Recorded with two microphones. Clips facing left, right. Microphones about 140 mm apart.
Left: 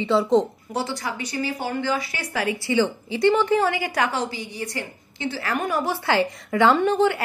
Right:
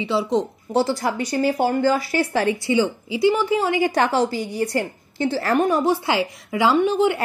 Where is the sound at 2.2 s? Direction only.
30° right (ahead or behind).